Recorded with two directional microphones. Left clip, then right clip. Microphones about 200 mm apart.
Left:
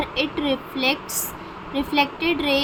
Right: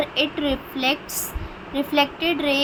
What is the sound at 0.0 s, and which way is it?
A woman's voice, 5° right (ahead or behind).